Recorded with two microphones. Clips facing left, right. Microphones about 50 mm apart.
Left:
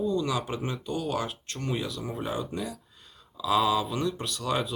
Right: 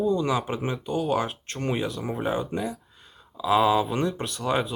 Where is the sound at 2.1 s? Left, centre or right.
Right.